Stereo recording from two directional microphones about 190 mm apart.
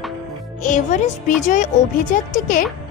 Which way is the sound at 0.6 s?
40° left (ahead or behind).